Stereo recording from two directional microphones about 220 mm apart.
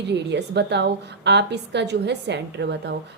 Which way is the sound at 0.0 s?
50° right (ahead or behind).